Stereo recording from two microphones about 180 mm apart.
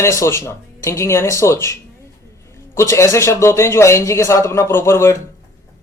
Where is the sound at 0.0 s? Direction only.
15° left (ahead or behind).